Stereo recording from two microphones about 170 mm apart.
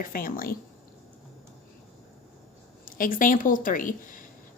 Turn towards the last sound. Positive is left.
turn(degrees=55)  # may be behind; listen again after turning